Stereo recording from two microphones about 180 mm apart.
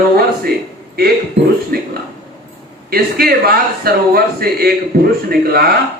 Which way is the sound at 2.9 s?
55° right (ahead or behind).